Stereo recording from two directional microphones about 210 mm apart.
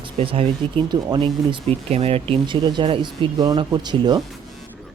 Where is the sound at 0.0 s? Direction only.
25° right (ahead or behind).